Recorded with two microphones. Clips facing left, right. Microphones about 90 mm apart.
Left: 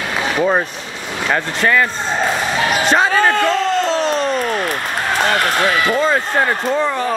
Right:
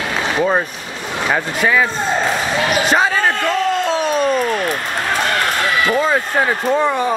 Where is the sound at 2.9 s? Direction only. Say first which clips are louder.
Left 4 dB; centre (ahead or behind).